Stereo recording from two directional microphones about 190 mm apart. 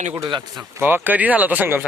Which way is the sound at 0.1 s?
20° right (ahead or behind).